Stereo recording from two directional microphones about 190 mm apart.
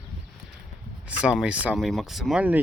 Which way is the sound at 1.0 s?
5° right (ahead or behind).